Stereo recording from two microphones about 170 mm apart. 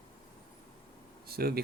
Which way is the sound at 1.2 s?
65° right (ahead or behind).